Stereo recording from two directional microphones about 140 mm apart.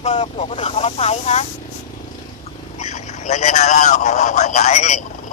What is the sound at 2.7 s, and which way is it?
A man's voice, 55° left (ahead or behind).